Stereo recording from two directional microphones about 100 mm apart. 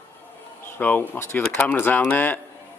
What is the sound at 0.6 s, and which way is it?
Speech, 20° left (ahead or behind).